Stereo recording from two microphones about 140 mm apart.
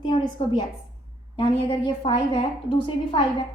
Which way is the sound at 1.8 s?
35° left (ahead or behind).